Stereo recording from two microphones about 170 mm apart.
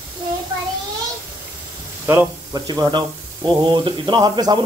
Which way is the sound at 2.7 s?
25° right (ahead or behind).